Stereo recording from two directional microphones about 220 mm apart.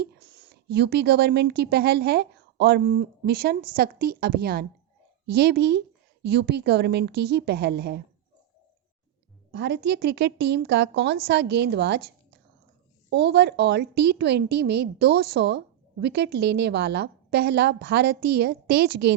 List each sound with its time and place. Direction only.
0.0 s a woman's voice: 50° right (ahead or behind)
9.5 s a woman's voice: 50° right (ahead or behind)